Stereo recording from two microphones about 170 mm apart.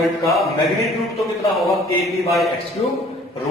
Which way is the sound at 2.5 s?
35° left (ahead or behind).